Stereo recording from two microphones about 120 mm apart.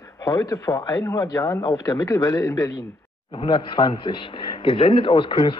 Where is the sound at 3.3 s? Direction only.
45° left (ahead or behind).